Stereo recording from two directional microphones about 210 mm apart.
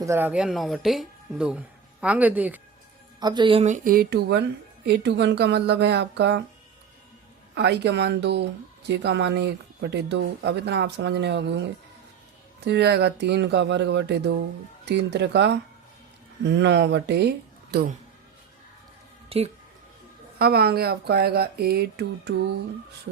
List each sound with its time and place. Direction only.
0.0 s speech: 10° right (ahead or behind)
3.2 s speech: 20° right (ahead or behind); by 6.4 s 55° right (ahead or behind)
7.5 s speech: 55° right (ahead or behind)
19.3 s speech: 25° right (ahead or behind)
20.4 s speech: 45° right (ahead or behind)